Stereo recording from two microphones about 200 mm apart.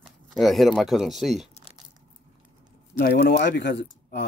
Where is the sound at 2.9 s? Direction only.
55° left (ahead or behind).